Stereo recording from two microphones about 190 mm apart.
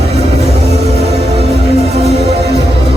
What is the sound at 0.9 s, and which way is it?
Music, 35° right (ahead or behind).